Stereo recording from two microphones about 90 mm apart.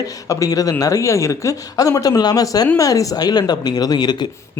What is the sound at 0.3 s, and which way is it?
Speech, 40° left (ahead or behind).